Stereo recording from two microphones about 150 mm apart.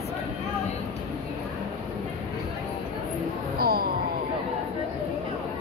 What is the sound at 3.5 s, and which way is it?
Music, 90° right.